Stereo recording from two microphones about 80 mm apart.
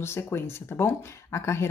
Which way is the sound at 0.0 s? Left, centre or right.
Left.